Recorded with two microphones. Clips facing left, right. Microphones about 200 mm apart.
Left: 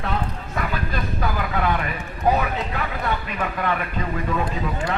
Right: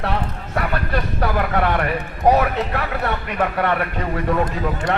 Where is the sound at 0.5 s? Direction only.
65° right (ahead or behind).